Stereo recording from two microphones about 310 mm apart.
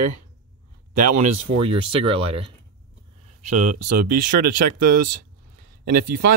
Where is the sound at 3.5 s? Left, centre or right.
Right.